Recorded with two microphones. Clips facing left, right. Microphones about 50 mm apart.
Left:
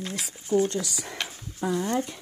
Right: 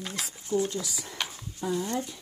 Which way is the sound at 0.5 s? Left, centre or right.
Left.